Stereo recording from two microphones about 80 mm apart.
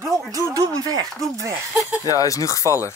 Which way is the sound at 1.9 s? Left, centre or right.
Left.